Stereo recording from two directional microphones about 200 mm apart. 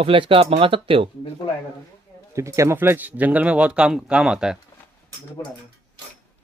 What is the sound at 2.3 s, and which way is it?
Speech, 15° right (ahead or behind).